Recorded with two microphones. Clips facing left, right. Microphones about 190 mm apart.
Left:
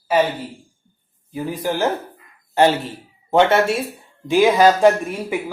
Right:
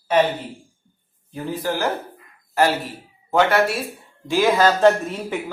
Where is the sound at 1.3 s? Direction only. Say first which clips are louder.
Left 2 dB; 10° left (ahead or behind).